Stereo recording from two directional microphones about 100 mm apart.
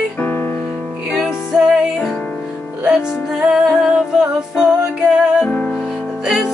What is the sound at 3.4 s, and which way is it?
Music, 5° right (ahead or behind).